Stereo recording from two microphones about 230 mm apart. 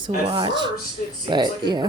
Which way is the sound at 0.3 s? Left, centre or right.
Centre.